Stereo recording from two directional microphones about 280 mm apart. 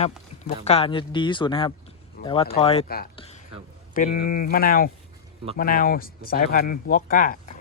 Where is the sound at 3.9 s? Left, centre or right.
Left.